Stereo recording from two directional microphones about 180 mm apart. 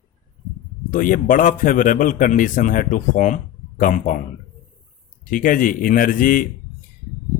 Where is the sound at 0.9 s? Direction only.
50° left (ahead or behind).